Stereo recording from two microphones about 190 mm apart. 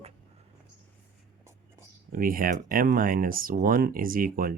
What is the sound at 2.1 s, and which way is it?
Speech, 50° right (ahead or behind).